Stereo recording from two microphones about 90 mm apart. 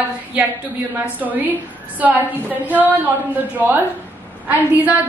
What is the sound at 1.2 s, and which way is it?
A woman's voice, 20° right (ahead or behind).